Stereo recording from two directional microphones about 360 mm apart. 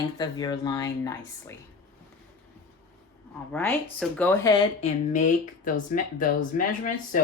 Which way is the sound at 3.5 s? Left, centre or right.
Centre.